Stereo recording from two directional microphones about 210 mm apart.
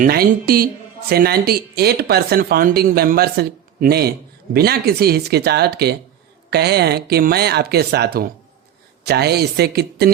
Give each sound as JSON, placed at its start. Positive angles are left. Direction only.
{"t": 0.0, "sound": "speech", "side_deg": -45}